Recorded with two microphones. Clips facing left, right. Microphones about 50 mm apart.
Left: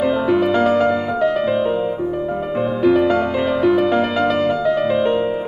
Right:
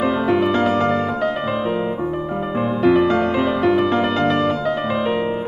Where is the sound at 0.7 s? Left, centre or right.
Right.